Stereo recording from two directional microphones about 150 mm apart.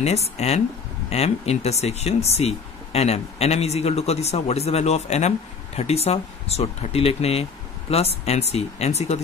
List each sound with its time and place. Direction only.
0.0 s speech: 45° left (ahead or behind)